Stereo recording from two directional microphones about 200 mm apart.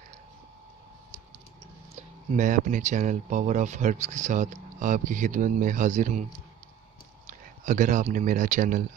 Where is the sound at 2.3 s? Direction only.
40° right (ahead or behind).